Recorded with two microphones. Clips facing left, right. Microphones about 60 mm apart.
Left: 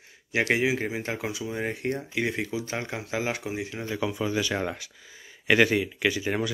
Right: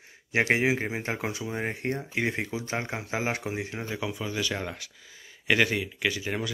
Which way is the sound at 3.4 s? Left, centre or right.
Right.